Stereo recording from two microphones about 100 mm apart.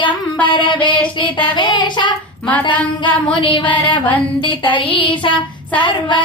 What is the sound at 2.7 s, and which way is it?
Speech, 15° left (ahead or behind).